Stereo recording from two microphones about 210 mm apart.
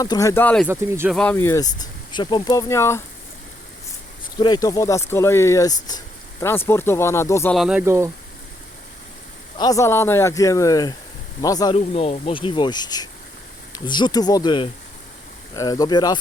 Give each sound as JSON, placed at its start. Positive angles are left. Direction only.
{"t": 0.0, "sound": "speech", "side_deg": 15}
{"t": 0.7, "sound": "speech", "side_deg": -10}
{"t": 1.1, "sound": "speech", "side_deg": 5}
{"t": 4.4, "sound": "speech", "side_deg": 20}
{"t": 7.5, "sound": "speech", "side_deg": 0}
{"t": 9.6, "sound": "speech", "side_deg": 15}
{"t": 11.8, "sound": "speech", "side_deg": 30}